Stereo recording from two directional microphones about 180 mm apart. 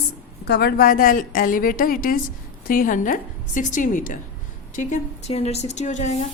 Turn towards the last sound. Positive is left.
turn(degrees=40)  # may be behind; listen again after turning